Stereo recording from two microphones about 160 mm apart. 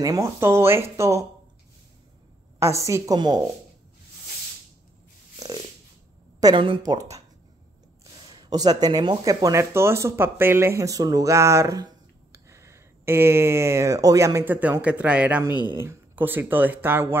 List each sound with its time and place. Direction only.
0.0 s speech: 20° right (ahead or behind)
2.6 s a woman's voice: 20° right (ahead or behind)
6.4 s a woman's voice: 30° right (ahead or behind)
8.4 s speech: 25° right (ahead or behind)